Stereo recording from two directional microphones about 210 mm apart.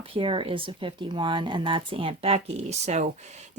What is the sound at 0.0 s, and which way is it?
Speech, 25° right (ahead or behind).